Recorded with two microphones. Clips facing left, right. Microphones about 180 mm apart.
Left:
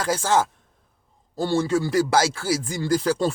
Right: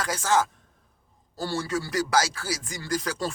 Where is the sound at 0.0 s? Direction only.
30° left (ahead or behind).